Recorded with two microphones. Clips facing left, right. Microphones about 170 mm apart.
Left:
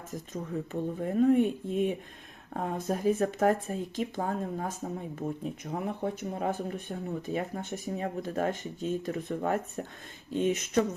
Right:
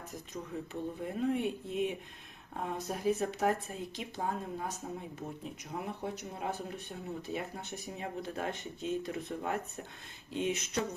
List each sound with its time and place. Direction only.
0.7 s speech: 45° left (ahead or behind)